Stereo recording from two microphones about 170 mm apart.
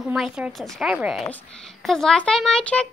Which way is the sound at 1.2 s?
5° left (ahead or behind).